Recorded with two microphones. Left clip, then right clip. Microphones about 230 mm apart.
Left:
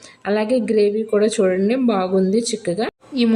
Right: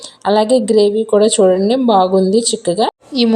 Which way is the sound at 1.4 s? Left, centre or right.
Centre.